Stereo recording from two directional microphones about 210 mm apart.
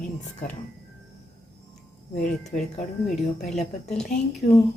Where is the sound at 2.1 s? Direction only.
35° left (ahead or behind).